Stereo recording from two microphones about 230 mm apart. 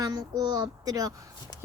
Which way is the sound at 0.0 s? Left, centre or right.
Centre.